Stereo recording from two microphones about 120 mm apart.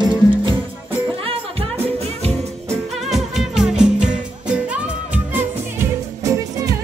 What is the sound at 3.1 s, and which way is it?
Music, centre (ahead or behind).